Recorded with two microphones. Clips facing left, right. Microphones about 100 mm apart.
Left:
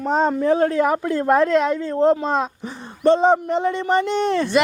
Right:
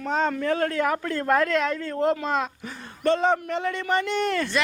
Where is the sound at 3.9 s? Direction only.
Centre (ahead or behind).